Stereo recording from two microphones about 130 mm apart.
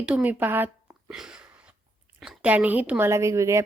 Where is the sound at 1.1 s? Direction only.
5° right (ahead or behind).